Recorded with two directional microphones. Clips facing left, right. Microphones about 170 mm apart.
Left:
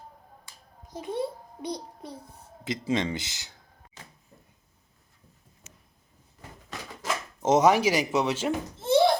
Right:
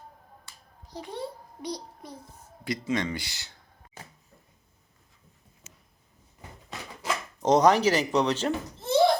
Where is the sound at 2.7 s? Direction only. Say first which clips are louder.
Left 1 dB; 25° left (ahead or behind).